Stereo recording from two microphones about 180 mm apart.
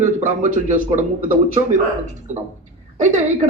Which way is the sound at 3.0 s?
40° right (ahead or behind).